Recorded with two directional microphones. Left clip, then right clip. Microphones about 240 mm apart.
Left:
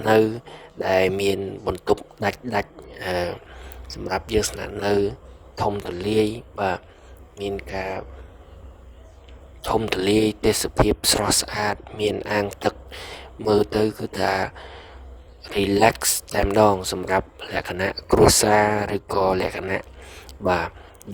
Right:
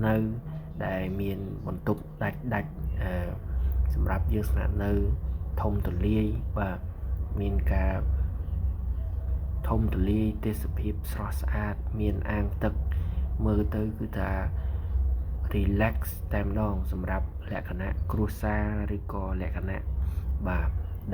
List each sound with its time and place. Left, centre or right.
0.9 s speech: left
9.6 s speech: left
15.5 s speech: left